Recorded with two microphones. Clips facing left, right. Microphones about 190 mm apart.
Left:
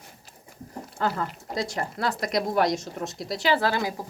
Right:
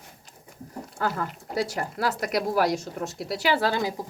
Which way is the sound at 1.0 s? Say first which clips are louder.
Left 1 dB; 5° right (ahead or behind).